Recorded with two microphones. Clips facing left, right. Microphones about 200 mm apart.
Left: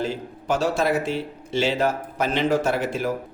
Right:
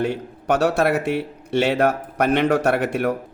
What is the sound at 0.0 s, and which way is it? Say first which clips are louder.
A man's voice: right 4 dB; 65° right (ahead or behind).